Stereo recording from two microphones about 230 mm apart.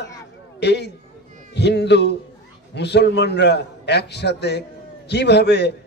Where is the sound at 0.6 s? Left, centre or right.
Left.